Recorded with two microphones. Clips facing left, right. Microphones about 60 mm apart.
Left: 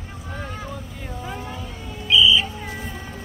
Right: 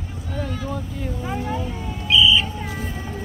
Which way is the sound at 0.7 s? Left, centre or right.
Centre.